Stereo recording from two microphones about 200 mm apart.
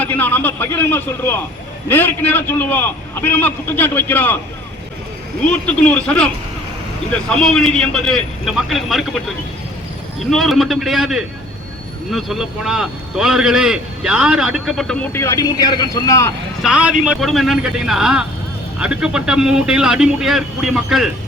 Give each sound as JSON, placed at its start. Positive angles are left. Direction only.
{"t": 0.0, "sound": "a man's voice", "side_deg": 10}
{"t": 5.5, "sound": "a man's voice", "side_deg": 5}
{"t": 10.2, "sound": "a man's voice", "side_deg": 0}
{"t": 15.1, "sound": "a man's voice", "side_deg": 15}
{"t": 16.6, "sound": "a man's voice", "side_deg": -5}